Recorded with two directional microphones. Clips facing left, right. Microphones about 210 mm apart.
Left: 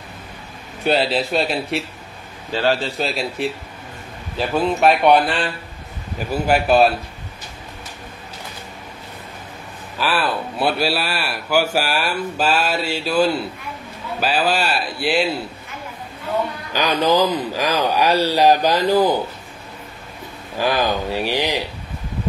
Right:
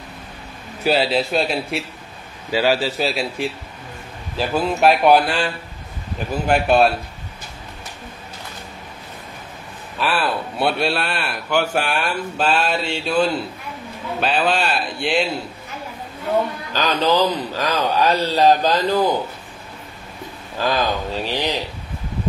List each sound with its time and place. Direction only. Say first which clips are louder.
0.8 s a man's voice: even; centre (ahead or behind)
9.9 s a man's voice: even; centre (ahead or behind)
16.7 s speech: left 1 dB; 15° left (ahead or behind)
20.5 s speech: left 1 dB; 15° left (ahead or behind)